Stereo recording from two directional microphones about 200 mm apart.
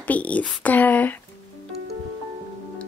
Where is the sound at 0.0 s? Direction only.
5° left (ahead or behind).